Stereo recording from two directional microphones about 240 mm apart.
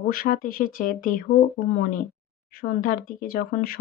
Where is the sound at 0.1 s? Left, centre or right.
Left.